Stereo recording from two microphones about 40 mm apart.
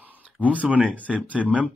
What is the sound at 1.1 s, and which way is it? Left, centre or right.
Speech, right.